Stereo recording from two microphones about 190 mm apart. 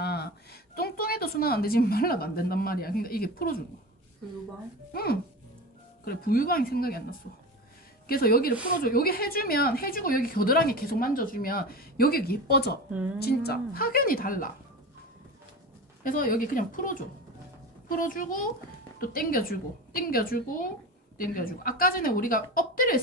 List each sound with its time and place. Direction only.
0.0 s a woman's voice: 60° left (ahead or behind)
4.9 s a woman's voice: 55° left (ahead or behind)
12.9 s speech: 5° right (ahead or behind)
13.2 s a woman's voice: 55° left (ahead or behind)
16.0 s a woman's voice: 45° left (ahead or behind)